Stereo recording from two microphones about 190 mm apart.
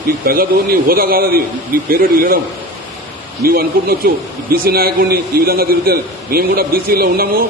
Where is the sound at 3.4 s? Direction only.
50° right (ahead or behind).